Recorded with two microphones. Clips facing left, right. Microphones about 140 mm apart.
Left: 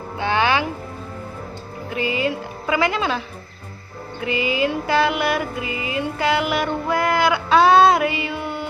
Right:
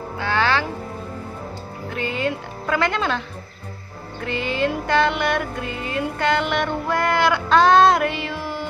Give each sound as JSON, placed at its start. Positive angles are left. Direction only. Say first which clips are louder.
{"t": 0.2, "sound": "music", "louder": "left 2 dB", "side_deg": 15}
{"t": 1.9, "sound": "music", "louder": "left 2 dB", "side_deg": 5}